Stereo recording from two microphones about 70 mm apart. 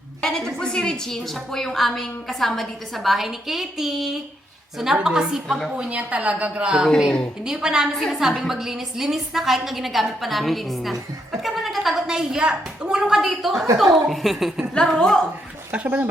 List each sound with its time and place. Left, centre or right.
0.2 s a woman's voice: centre
5.9 s a woman's voice: centre
14.8 s a woman's voice: centre
15.7 s a woman's voice: right